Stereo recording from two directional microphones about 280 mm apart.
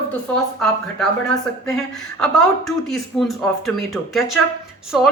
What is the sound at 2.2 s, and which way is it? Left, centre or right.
Speech, centre.